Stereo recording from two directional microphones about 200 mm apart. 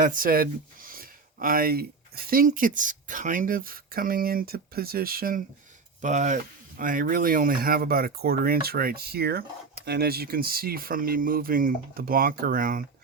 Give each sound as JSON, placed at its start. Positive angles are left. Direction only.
{"t": 0.0, "sound": "speech", "side_deg": -45}